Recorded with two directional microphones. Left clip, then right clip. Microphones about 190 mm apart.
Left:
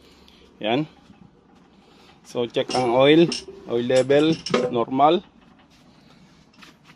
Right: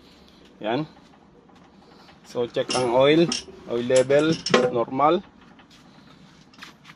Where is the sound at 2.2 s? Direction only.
45° left (ahead or behind).